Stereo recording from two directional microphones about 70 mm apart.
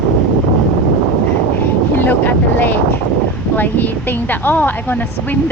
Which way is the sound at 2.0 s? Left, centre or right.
Left.